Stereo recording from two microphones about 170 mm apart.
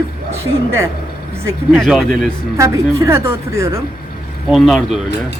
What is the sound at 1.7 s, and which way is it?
Speech, centre (ahead or behind).